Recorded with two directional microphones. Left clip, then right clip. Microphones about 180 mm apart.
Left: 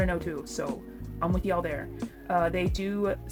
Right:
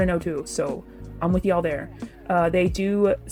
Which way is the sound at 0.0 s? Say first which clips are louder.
Right 6 dB; 25° right (ahead or behind).